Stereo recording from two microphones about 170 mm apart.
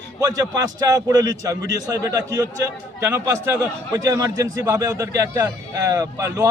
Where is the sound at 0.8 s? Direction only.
20° right (ahead or behind).